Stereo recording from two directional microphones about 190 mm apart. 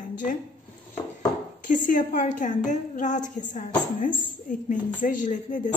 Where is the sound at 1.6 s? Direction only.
45° left (ahead or behind).